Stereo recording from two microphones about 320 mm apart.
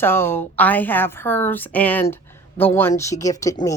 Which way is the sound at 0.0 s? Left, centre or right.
Centre.